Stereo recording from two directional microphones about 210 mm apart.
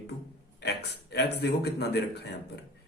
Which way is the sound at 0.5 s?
50° left (ahead or behind).